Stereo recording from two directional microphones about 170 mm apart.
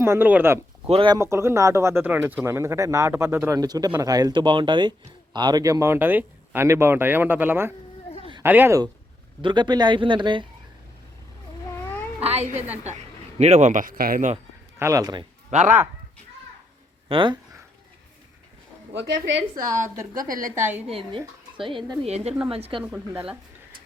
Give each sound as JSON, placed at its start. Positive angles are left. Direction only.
{"t": 0.0, "sound": "speech", "side_deg": -15}
{"t": 0.9, "sound": "speech", "side_deg": -30}
{"t": 1.2, "sound": "speech", "side_deg": -15}
{"t": 9.4, "sound": "speech", "side_deg": -25}
{"t": 12.2, "sound": "a woman's voice", "side_deg": -40}
{"t": 14.8, "sound": "speech", "side_deg": -20}
{"t": 15.4, "sound": "speech", "side_deg": -45}
{"t": 17.1, "sound": "speech", "side_deg": -30}
{"t": 20.1, "sound": "a woman's voice", "side_deg": -55}
{"t": 20.7, "sound": "speech", "side_deg": -10}
{"t": 21.6, "sound": "a woman's voice", "side_deg": -30}
{"t": 22.8, "sound": "speech", "side_deg": -10}